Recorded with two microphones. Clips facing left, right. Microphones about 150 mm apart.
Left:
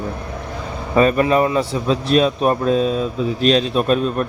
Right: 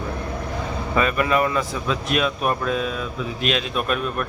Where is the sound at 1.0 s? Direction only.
35° left (ahead or behind).